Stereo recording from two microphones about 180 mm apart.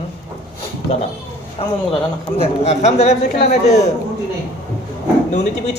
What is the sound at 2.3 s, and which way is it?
A man's voice, 35° left (ahead or behind).